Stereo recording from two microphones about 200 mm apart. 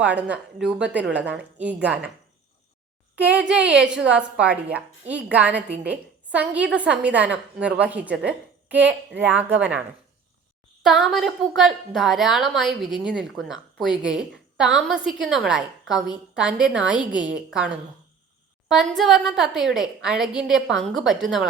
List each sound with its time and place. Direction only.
0.0 s a woman's voice: 5° right (ahead or behind)
3.2 s a child's voice: 5° right (ahead or behind)
10.8 s a woman's voice: centre (ahead or behind)
18.7 s a woman's voice: centre (ahead or behind)